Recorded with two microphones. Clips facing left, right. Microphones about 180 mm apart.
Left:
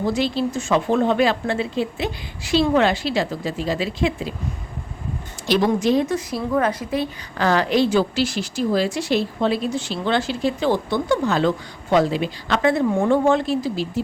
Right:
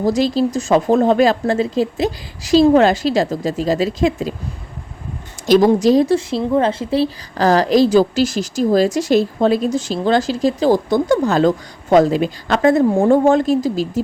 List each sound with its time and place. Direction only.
0.0 s a woman's voice: 40° right (ahead or behind)
5.5 s a woman's voice: 40° right (ahead or behind)